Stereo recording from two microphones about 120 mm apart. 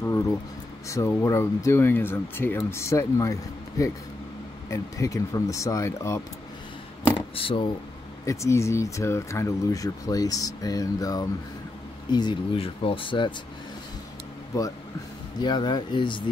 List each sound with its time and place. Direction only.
0.0 s a sound: 25° left (ahead or behind)
0.8 s speech: 25° left (ahead or behind)
7.2 s speech: 45° left (ahead or behind)
8.3 s speech: 25° left (ahead or behind); by 13.3 s 45° left (ahead or behind)
14.5 s speech: 30° left (ahead or behind)